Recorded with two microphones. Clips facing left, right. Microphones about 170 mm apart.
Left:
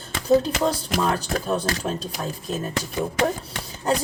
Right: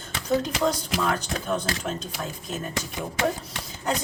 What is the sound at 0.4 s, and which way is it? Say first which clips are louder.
Speech: left 2 dB; 30° left (ahead or behind).